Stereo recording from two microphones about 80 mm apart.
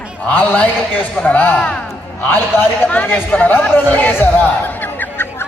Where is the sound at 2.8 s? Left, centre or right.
Left.